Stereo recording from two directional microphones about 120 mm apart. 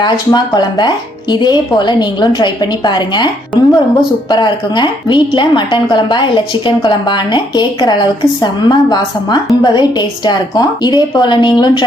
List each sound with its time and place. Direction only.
0.0 s a woman's voice: 40° left (ahead or behind)